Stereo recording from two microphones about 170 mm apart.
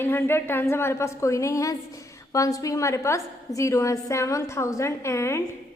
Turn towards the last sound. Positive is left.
turn(degrees=15)  # may be behind; listen again after turning